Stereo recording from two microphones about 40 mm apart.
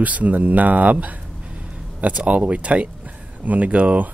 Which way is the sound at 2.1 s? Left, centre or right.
Right.